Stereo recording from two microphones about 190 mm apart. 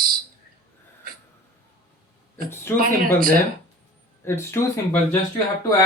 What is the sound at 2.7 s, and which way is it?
Speech, 50° right (ahead or behind).